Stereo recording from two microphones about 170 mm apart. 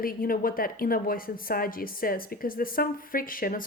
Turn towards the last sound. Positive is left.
turn(degrees=55)  # may be behind; listen again after turning